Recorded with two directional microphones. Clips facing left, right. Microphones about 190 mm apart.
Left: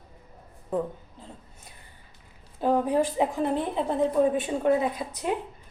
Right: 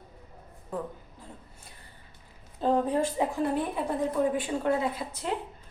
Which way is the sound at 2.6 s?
15° left (ahead or behind).